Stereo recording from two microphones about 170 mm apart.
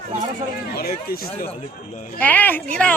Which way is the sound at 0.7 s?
65° left (ahead or behind).